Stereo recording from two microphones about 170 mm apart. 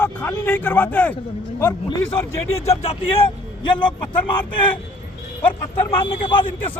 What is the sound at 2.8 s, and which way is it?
A man's voice, 35° left (ahead or behind).